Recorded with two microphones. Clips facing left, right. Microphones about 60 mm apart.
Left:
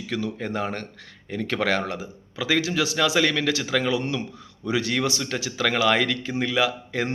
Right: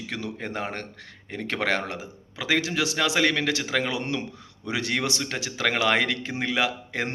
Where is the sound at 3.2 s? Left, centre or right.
Right.